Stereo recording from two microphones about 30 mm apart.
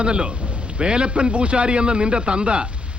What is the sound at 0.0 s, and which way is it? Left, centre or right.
A man's voice, right.